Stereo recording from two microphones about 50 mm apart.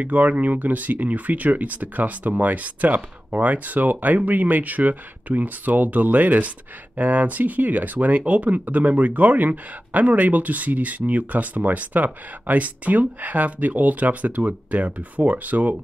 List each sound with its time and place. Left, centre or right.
0.0 s speech: right